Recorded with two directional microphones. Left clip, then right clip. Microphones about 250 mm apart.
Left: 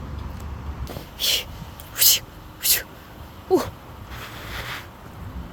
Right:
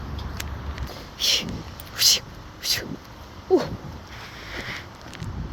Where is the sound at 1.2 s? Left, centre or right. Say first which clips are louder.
Right 1 dB; centre.